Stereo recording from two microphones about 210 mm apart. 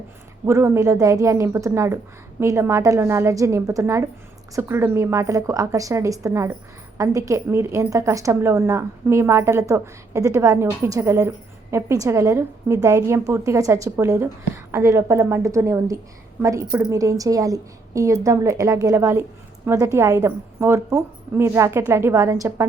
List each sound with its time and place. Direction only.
0.4 s a woman's voice: 10° right (ahead or behind)